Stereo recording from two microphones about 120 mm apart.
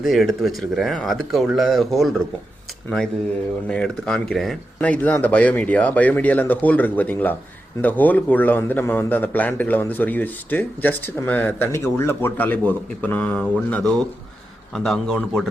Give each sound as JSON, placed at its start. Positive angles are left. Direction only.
{"t": 0.0, "sound": "speech", "side_deg": 0}
{"t": 3.7, "sound": "a man's voice", "side_deg": 5}
{"t": 4.8, "sound": "a man's voice", "side_deg": 10}